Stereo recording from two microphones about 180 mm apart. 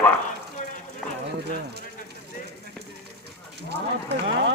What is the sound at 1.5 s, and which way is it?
Speech, 65° right (ahead or behind).